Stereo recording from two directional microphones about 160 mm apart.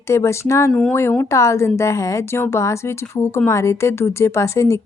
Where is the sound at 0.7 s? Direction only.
5° left (ahead or behind).